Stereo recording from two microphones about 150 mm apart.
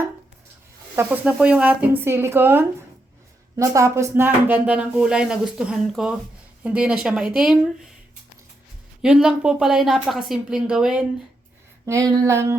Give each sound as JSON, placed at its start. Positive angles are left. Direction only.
{"t": 0.9, "sound": "speech", "side_deg": -10}
{"t": 9.0, "sound": "a woman's voice", "side_deg": -5}
{"t": 11.9, "sound": "a sound", "side_deg": -25}